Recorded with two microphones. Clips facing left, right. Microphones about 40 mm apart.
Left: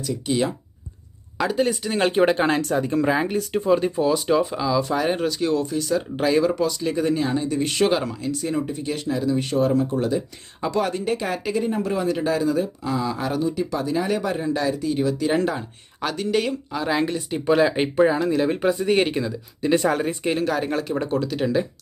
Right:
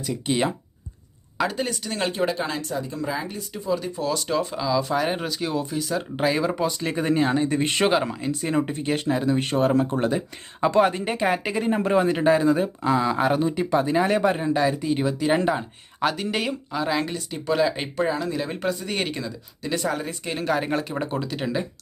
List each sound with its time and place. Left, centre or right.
0.3 s speech: right
1.4 s speech: centre
1.7 s speech: centre
2.2 s speech: left
4.0 s speech: centre
6.7 s speech: right
8.5 s speech: right
11.6 s speech: right; by 17.2 s centre
17.2 s speech: centre
18.7 s speech: centre
20.4 s speech: centre